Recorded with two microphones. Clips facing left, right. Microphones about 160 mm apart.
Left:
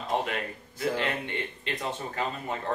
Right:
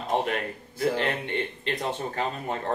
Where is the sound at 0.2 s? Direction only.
40° right (ahead or behind).